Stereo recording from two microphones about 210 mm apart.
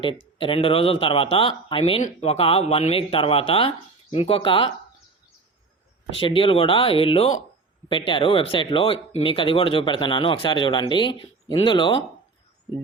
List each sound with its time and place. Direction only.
0.0 s speech: 25° left (ahead or behind)
6.1 s speech: 25° left (ahead or behind)